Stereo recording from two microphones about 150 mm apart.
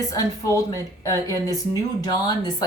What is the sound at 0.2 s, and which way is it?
Speech, 20° left (ahead or behind).